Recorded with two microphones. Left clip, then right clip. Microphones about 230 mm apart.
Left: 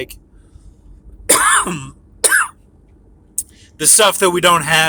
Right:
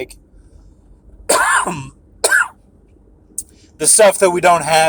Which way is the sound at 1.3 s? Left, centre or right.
Centre.